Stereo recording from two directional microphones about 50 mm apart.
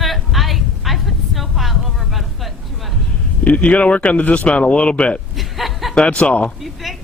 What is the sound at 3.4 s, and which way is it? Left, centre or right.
Speech, left.